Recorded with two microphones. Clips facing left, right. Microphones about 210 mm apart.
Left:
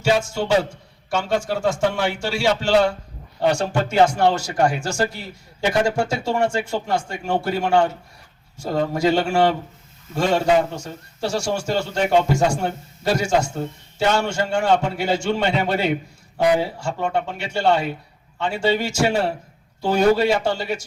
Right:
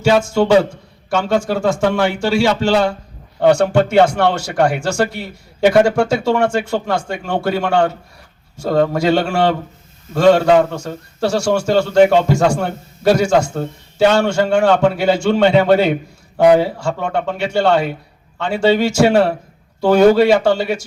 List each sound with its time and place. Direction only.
0.0 s a man's voice: 90° right
3.4 s a man's voice: 65° right (ahead or behind)